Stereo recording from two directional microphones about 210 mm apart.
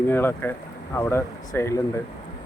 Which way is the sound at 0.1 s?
10° left (ahead or behind).